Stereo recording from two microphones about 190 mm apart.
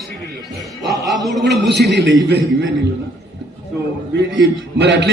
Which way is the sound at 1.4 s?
65° right (ahead or behind).